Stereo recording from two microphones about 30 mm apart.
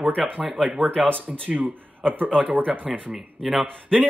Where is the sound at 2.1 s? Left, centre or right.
Right.